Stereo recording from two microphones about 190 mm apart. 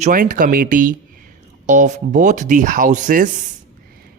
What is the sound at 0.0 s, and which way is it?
Speech, 45° right (ahead or behind).